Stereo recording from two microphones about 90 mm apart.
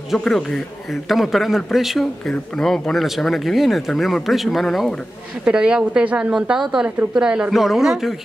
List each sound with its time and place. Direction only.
0.1 s speech: 5° left (ahead or behind)
5.4 s a woman's voice: 10° right (ahead or behind)